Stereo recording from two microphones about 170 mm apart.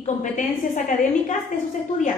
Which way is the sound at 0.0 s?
45° left (ahead or behind).